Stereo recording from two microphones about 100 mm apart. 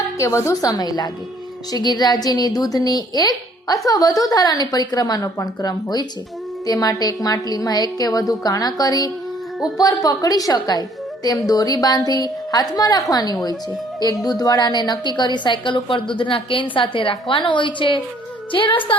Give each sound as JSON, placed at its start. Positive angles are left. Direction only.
{"t": 0.2, "sound": "a woman's voice", "side_deg": 30}